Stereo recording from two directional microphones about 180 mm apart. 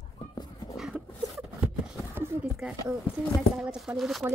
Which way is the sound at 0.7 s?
Centre (ahead or behind).